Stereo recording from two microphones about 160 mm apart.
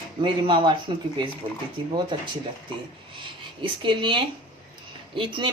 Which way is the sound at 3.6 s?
30° right (ahead or behind).